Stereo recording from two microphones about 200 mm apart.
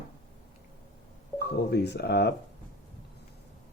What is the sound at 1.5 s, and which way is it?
Speech, 55° left (ahead or behind).